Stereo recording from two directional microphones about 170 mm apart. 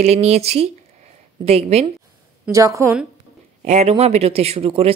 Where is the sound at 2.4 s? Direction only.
20° right (ahead or behind).